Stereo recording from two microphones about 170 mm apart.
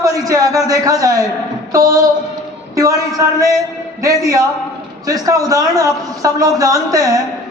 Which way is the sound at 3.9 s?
20° right (ahead or behind).